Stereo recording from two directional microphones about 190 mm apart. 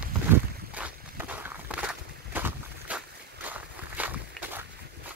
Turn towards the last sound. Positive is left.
turn(degrees=-10)  # may be behind; listen again after turning